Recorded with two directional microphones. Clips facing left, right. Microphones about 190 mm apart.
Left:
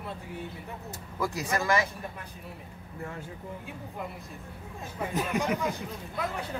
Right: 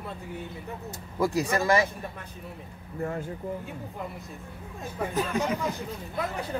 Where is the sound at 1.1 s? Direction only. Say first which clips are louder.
Right 5 dB; 25° right (ahead or behind).